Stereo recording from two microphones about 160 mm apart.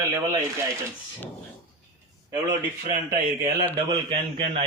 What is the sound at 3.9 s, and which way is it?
Speech, 30° right (ahead or behind).